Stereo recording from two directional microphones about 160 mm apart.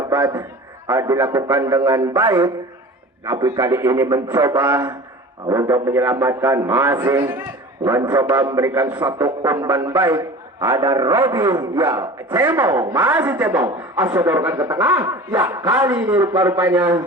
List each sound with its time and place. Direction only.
0.1 s a man's voice: 20° right (ahead or behind)
4.7 s a woman's voice: 15° right (ahead or behind)